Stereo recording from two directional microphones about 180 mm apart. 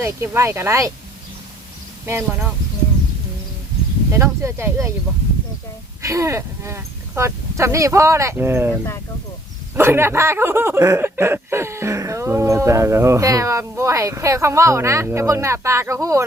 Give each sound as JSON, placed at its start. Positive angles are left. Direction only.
{"t": 0.0, "sound": "speech", "side_deg": -15}
{"t": 2.0, "sound": "speech", "side_deg": -15}
{"t": 4.1, "sound": "speech", "side_deg": -15}
{"t": 6.0, "sound": "speech", "side_deg": -15}
{"t": 9.7, "sound": "speech", "side_deg": -15}